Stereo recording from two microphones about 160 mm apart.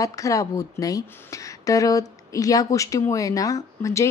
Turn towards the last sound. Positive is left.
turn(degrees=20)  # may be behind; listen again after turning